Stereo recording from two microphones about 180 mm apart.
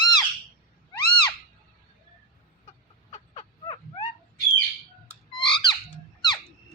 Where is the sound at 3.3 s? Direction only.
30° left (ahead or behind).